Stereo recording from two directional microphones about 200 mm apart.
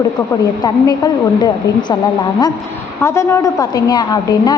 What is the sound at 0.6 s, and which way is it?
Speech, 20° left (ahead or behind).